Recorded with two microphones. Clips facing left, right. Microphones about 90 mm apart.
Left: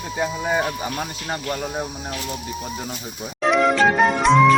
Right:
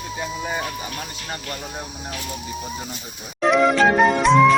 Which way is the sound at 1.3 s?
25° left (ahead or behind).